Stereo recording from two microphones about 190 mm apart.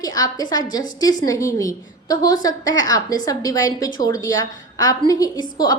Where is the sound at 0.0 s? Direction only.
20° left (ahead or behind).